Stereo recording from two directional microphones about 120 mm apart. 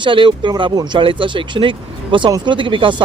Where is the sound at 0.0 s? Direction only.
40° right (ahead or behind).